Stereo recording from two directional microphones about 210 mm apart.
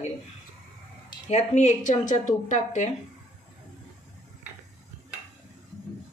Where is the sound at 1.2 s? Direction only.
30° left (ahead or behind).